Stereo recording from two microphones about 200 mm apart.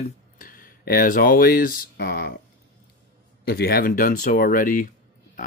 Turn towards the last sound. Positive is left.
turn(degrees=45)  # may be behind; listen again after turning